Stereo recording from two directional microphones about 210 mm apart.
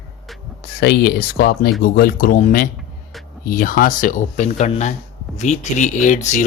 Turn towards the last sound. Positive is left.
turn(degrees=35)  # may be behind; listen again after turning